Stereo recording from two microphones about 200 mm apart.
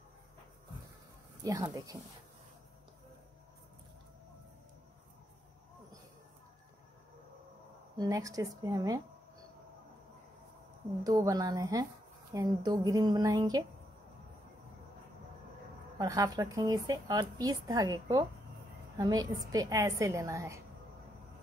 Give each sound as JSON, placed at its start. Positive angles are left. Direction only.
{"t": 1.4, "sound": "a woman's voice", "side_deg": -15}
{"t": 8.0, "sound": "a woman's voice", "side_deg": -15}
{"t": 11.1, "sound": "a woman's voice", "side_deg": -20}
{"t": 16.0, "sound": "a woman's voice", "side_deg": -20}